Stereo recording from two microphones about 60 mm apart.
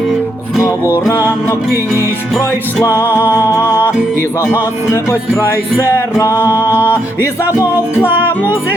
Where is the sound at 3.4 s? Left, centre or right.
Left.